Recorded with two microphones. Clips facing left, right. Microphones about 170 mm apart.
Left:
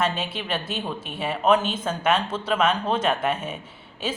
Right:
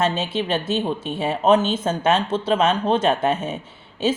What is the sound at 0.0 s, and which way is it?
A woman's voice, 25° right (ahead or behind).